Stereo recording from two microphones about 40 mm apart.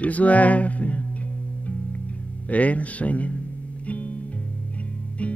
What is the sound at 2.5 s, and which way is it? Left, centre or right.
Speech, left.